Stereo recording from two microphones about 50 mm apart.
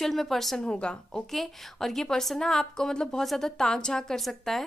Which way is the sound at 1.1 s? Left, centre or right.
Centre.